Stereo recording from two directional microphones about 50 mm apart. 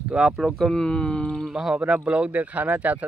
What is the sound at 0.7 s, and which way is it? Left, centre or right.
Speech, left.